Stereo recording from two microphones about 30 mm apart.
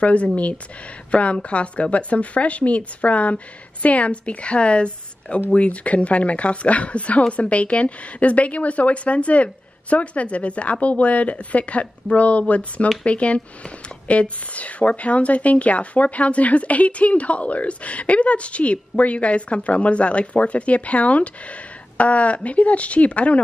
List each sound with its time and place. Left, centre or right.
0.0 s a woman's voice: left